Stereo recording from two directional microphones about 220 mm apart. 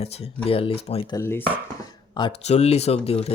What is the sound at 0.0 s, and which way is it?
Speech, 30° left (ahead or behind).